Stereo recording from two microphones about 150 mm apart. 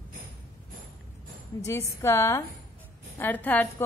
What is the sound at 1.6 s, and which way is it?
A woman's voice, 20° left (ahead or behind).